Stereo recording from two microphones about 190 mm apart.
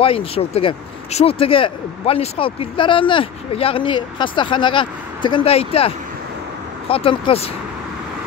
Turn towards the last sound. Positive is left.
turn(degrees=30)  # may be behind; listen again after turning